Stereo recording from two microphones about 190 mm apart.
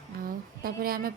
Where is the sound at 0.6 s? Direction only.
50° right (ahead or behind).